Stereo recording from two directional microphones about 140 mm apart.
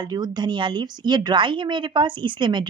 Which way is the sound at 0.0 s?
30° right (ahead or behind).